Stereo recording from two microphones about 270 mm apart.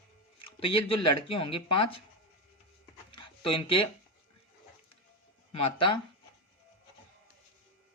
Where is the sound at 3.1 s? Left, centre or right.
Centre.